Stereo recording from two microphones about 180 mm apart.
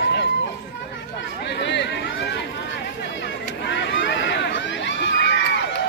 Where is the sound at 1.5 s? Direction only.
70° left (ahead or behind).